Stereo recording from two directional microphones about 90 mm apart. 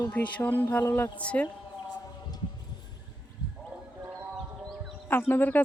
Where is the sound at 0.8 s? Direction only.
30° left (ahead or behind).